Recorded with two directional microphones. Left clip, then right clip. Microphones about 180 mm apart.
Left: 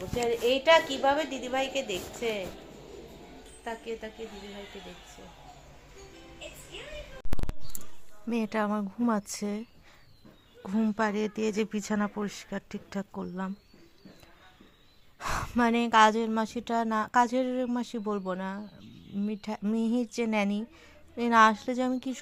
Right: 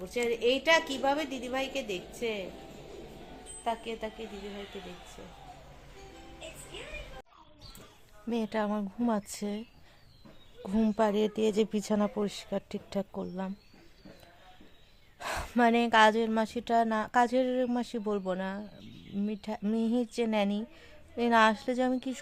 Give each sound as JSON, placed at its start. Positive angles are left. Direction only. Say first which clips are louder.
{"t": 0.2, "sound": "a woman's voice", "louder": "left 1 dB", "side_deg": -40}
{"t": 3.6, "sound": "speech", "louder": "right 3 dB", "side_deg": -25}
{"t": 8.3, "sound": "speech", "louder": "left 2 dB", "side_deg": 10}
{"t": 10.7, "sound": "speech", "louder": "right 1 dB", "side_deg": -10}
{"t": 15.2, "sound": "a woman's voice", "louder": "right 1 dB", "side_deg": 0}